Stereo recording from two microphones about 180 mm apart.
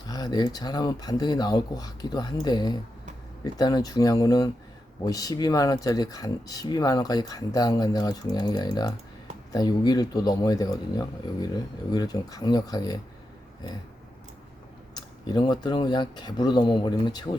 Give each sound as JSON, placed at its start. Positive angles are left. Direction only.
{"t": 0.1, "sound": "speech", "side_deg": 20}
{"t": 14.9, "sound": "speech", "side_deg": 25}